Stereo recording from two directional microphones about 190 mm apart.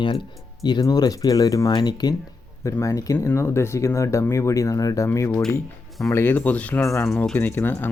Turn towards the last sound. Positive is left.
turn(degrees=10)  # may be behind; listen again after turning